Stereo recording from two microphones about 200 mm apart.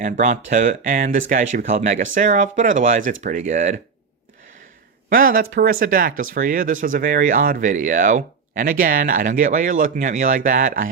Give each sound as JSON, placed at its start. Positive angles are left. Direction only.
{"t": 0.0, "sound": "speech", "side_deg": -40}
{"t": 5.0, "sound": "speech", "side_deg": -45}